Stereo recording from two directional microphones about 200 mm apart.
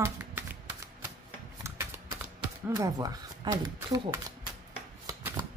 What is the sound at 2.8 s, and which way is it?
Speech, 20° right (ahead or behind).